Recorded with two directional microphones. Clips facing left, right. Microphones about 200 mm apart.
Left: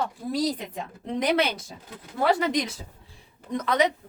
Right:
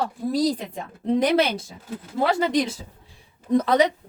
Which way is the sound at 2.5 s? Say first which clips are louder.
Right 5 dB; 30° right (ahead or behind).